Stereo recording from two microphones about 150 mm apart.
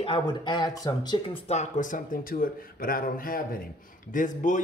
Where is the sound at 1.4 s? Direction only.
55° left (ahead or behind); by 3.6 s 75° left (ahead or behind).